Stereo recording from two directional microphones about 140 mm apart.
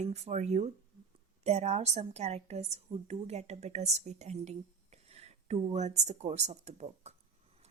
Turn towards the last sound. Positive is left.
turn(degrees=-55)  # may be behind; listen again after turning